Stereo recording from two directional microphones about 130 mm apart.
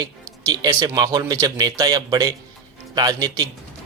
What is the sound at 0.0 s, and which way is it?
A man's voice, 30° right (ahead or behind).